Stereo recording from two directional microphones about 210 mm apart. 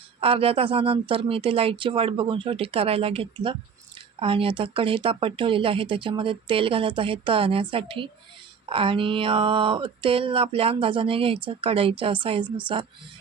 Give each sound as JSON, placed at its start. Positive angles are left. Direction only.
{"t": 0.2, "sound": "speech", "side_deg": -25}